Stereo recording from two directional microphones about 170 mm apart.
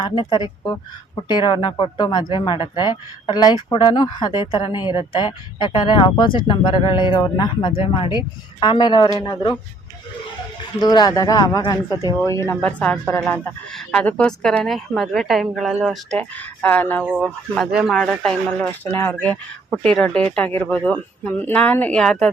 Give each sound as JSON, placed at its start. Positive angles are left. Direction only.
{"t": 0.0, "sound": "speech", "side_deg": 25}
{"t": 10.8, "sound": "speech", "side_deg": 25}
{"t": 17.1, "sound": "speech", "side_deg": -5}
{"t": 19.8, "sound": "speech", "side_deg": 10}